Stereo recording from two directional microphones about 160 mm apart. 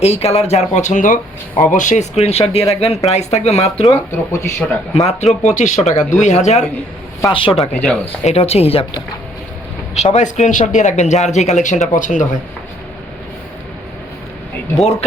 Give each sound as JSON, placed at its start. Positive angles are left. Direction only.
{"t": 0.0, "sound": "speech", "side_deg": 40}
{"t": 3.8, "sound": "speech", "side_deg": 15}
{"t": 4.9, "sound": "speech", "side_deg": 45}
{"t": 7.3, "sound": "speech", "side_deg": 35}
{"t": 7.5, "sound": "speech", "side_deg": 5}
{"t": 8.2, "sound": "speech", "side_deg": 40}
{"t": 9.9, "sound": "speech", "side_deg": 45}